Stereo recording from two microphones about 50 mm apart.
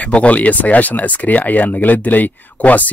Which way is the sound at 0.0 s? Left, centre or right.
Left.